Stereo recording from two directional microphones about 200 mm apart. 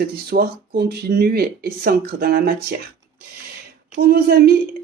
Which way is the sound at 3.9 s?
50° right (ahead or behind).